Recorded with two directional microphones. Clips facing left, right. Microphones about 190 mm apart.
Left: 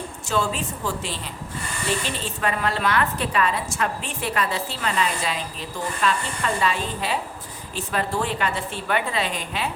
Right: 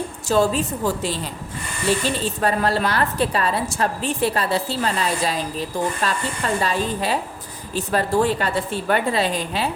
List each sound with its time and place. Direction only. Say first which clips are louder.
0.3 s a woman's voice: right 6 dB; 35° right (ahead or behind)